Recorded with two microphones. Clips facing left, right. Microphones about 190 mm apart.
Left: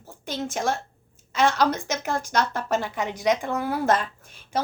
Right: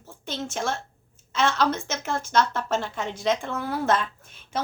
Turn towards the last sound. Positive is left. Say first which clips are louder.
# left 2 dB
turn(degrees=10)  # may be behind; listen again after turning